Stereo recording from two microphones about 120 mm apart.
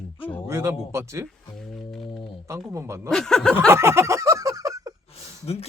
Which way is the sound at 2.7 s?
25° right (ahead or behind).